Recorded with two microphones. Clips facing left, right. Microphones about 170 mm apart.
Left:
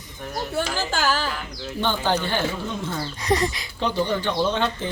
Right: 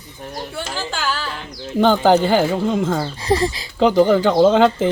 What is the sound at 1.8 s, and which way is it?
Speech, 90° right.